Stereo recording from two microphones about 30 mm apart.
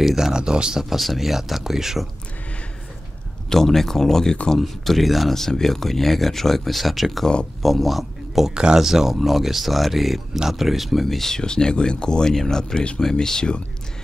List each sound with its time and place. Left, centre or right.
0.1 s speech: centre
0.8 s speech: centre
3.4 s speech: centre
4.6 s speech: centre
5.3 s speech: centre
8.5 s speech: right
8.8 s speech: centre
9.1 s speech: centre
11.3 s speech: left